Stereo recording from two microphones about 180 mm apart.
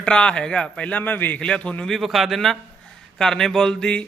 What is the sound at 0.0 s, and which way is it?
A man's voice, 5° left (ahead or behind).